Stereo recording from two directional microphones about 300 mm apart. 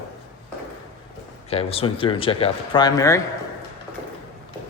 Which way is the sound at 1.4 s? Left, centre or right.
Centre.